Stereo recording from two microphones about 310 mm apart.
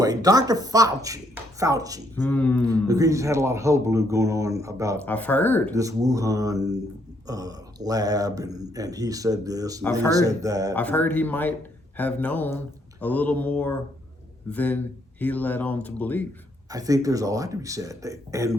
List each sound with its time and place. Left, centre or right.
0.0 s speech: centre
2.1 s speech: centre
2.6 s speech: centre
5.0 s speech: centre
5.7 s speech: centre
10.8 s speech: centre
16.6 s speech: centre